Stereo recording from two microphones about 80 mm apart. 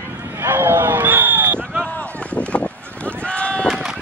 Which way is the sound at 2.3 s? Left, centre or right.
Centre.